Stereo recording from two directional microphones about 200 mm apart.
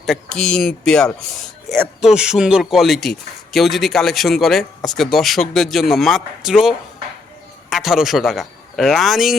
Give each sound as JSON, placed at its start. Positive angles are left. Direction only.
{"t": 0.0, "sound": "speech", "side_deg": 0}